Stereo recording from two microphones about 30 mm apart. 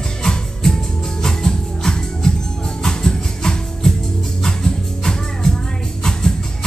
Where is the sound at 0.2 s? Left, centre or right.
Centre.